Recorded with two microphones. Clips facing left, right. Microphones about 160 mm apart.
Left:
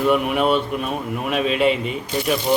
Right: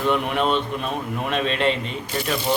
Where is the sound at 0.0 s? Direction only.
5° left (ahead or behind).